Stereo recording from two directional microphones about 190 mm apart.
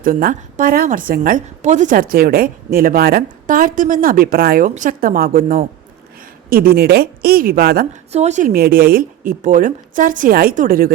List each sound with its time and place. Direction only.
0.0 s a woman's voice: 50° right (ahead or behind)
8.1 s a woman's voice: 35° right (ahead or behind)